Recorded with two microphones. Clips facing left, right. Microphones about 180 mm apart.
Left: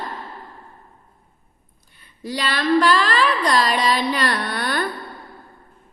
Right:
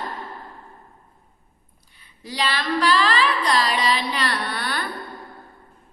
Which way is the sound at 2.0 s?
50° left (ahead or behind).